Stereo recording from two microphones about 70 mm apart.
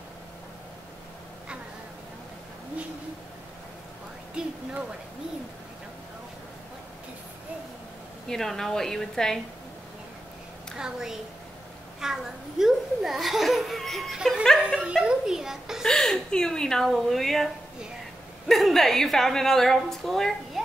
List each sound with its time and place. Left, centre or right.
8.3 s a woman's voice: centre
10.8 s a child's voice: centre
14.6 s a child's voice: centre
15.9 s speech: centre
18.5 s speech: centre